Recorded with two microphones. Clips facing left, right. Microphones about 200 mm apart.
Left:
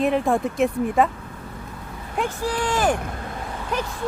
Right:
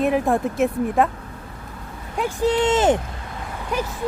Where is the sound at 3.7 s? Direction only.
10° right (ahead or behind).